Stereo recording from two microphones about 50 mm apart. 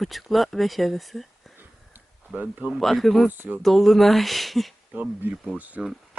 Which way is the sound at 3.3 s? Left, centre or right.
Right.